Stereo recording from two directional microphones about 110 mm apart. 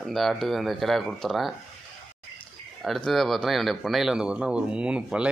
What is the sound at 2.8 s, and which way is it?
Speech, centre (ahead or behind).